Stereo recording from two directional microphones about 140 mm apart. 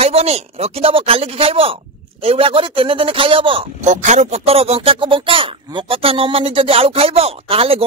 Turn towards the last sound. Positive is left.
turn(degrees=-45)  # may be behind; listen again after turning